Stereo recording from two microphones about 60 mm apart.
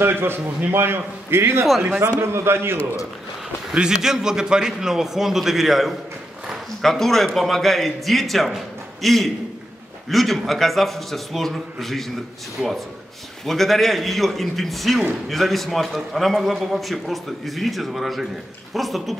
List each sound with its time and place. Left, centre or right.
0.0 s a man's voice: right
3.7 s a man's voice: centre
6.5 s a sound: centre
7.2 s a man's voice: centre